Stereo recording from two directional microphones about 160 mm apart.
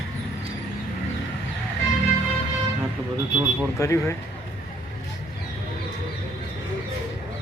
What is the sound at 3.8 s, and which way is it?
Speech, 20° left (ahead or behind).